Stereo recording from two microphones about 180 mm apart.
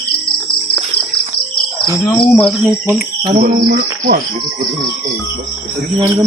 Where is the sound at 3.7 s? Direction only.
55° right (ahead or behind).